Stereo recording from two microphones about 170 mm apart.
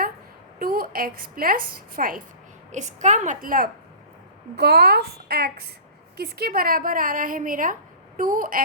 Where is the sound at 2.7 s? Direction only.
45° right (ahead or behind).